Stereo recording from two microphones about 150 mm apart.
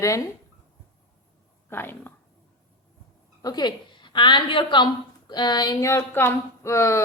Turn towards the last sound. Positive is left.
turn(degrees=20)  # may be behind; listen again after turning